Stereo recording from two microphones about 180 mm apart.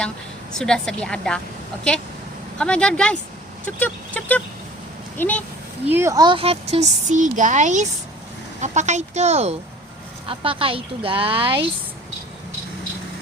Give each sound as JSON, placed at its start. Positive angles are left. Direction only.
{"t": 0.6, "sound": "a woman's voice", "side_deg": 5}
{"t": 2.6, "sound": "a woman's voice", "side_deg": 5}
{"t": 5.9, "sound": "speech", "side_deg": -15}